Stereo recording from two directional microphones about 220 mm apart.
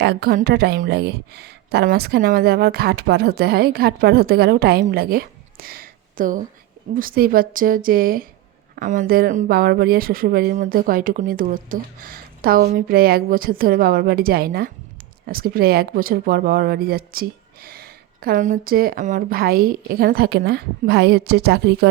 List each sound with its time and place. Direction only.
0.0 s speech: 45° right (ahead or behind)